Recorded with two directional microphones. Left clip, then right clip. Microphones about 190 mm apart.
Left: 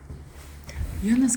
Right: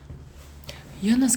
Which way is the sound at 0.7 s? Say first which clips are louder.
Right 1 dB; 30° right (ahead or behind).